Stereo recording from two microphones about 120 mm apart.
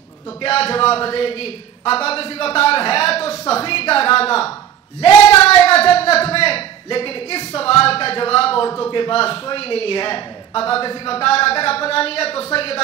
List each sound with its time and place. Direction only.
0.4 s a man's voice: 55° left (ahead or behind)
5.6 s a man's voice: 55° left (ahead or behind)